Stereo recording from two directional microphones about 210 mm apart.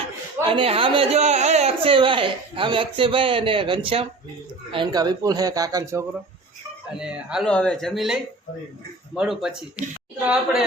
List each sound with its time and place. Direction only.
0.4 s speech: 25° right (ahead or behind); by 10.6 s 5° right (ahead or behind)